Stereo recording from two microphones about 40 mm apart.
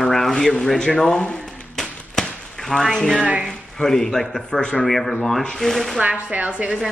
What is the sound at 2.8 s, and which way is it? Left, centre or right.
Speech, centre.